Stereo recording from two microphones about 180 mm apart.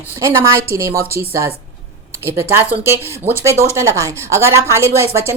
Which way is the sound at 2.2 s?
15° right (ahead or behind).